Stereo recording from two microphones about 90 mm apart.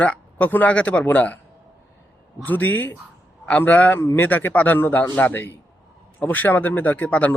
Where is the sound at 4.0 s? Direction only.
30° left (ahead or behind).